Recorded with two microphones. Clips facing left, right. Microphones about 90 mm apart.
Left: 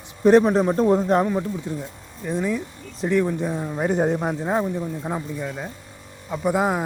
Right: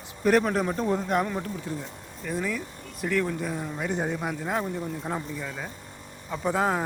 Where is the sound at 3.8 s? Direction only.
45° left (ahead or behind); by 4.6 s 25° left (ahead or behind).